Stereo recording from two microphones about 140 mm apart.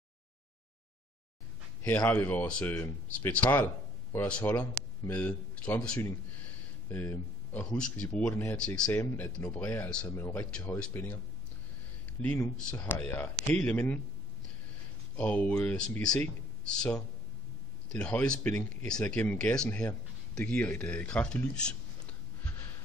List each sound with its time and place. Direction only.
1.8 s speech: 10° left (ahead or behind)
12.5 s speech: 15° left (ahead or behind)
15.1 s speech: 10° left (ahead or behind)